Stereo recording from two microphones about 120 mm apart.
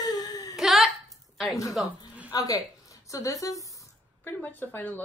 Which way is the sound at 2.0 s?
10° right (ahead or behind).